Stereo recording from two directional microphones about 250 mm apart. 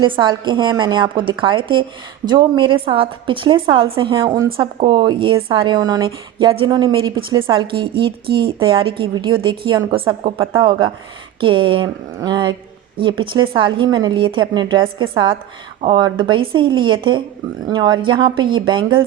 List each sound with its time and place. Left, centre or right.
0.0 s a woman's voice: centre